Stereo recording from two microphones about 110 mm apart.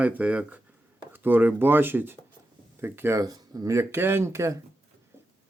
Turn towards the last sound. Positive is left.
turn(degrees=-25)  # may be behind; listen again after turning